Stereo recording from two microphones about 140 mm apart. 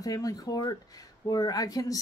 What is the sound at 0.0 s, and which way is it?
A woman's voice, 25° left (ahead or behind).